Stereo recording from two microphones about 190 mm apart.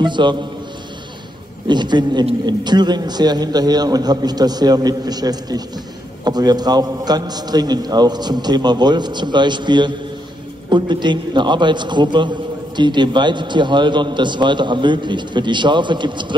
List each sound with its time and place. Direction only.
0.0 s a man's voice: 25° right (ahead or behind)
1.7 s a man's voice: 25° right (ahead or behind)